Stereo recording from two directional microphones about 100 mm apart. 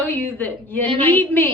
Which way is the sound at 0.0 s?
20° left (ahead or behind).